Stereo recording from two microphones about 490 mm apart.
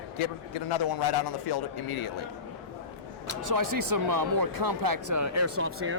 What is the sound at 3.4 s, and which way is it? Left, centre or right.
Speech, right.